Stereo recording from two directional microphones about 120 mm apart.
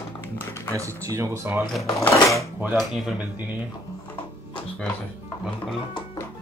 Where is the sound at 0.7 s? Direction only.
25° right (ahead or behind).